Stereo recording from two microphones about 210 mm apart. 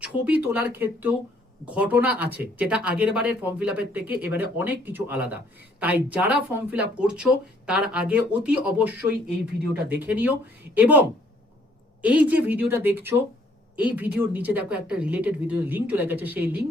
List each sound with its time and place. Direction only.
0.0 s speech: 5° right (ahead or behind)
12.0 s speech: 5° right (ahead or behind)